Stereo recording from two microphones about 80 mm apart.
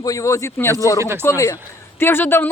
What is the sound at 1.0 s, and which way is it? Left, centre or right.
Speech, right.